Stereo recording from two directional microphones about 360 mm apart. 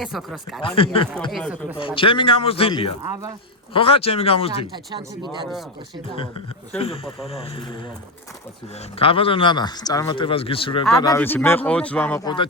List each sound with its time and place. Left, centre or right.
0.0 s speech: centre
0.6 s speech: centre
1.3 s speech: centre
2.0 s speech: centre
6.7 s speech: centre
9.0 s speech: centre